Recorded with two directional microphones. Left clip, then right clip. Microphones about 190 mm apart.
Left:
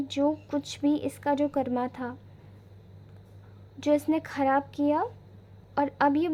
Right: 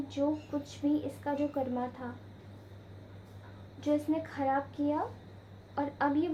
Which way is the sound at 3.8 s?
45° left (ahead or behind).